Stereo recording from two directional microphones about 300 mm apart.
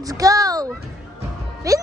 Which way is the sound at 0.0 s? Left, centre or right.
Centre.